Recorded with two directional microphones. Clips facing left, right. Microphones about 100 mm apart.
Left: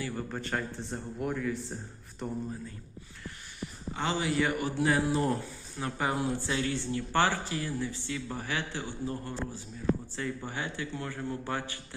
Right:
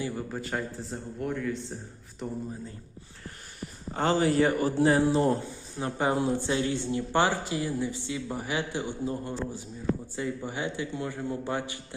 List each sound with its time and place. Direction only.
0.2 s a man's voice: 5° right (ahead or behind)
3.6 s a man's voice: 40° right (ahead or behind); by 11.9 s 20° right (ahead or behind)